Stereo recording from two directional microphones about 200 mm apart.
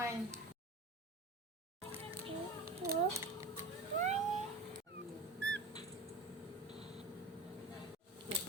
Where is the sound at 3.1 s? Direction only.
15° right (ahead or behind).